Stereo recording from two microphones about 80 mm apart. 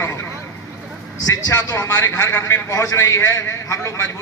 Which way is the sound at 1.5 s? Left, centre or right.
Left.